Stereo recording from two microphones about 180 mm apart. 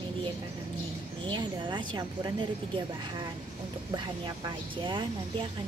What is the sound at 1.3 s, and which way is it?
A woman's voice, 25° right (ahead or behind).